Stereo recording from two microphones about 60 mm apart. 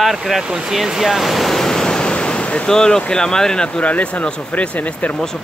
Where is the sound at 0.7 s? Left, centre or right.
Centre.